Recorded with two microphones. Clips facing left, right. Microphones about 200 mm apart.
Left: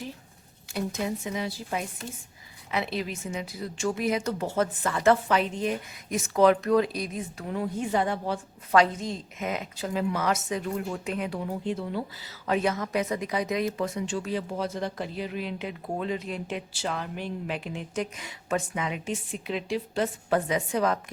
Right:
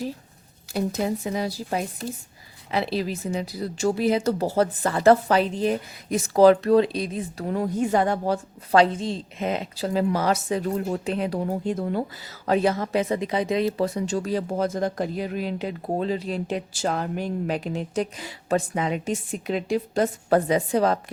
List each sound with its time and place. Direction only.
0.7 s a woman's voice: 35° right (ahead or behind)
7.4 s a woman's voice: 45° right (ahead or behind)
8.7 s a woman's voice: 30° right (ahead or behind)